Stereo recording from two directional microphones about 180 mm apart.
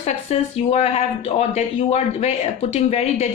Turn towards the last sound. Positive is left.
turn(degrees=35)  # may be behind; listen again after turning